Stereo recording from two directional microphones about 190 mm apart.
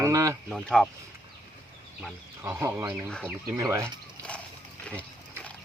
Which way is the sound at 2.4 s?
10° right (ahead or behind).